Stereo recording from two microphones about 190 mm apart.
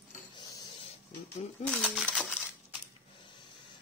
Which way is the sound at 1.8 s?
5° left (ahead or behind).